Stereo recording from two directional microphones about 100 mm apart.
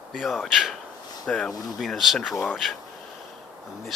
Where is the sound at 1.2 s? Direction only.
10° left (ahead or behind).